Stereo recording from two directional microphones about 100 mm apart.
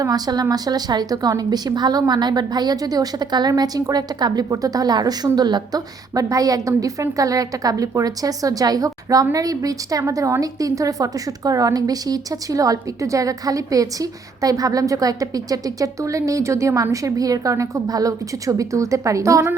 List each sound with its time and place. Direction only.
0.0 s a woman's voice: 40° right (ahead or behind)